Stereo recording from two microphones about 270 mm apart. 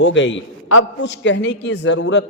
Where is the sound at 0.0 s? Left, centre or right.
Left.